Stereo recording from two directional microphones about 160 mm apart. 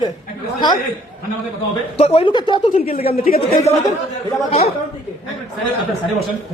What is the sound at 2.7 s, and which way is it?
Speech, 65° left (ahead or behind).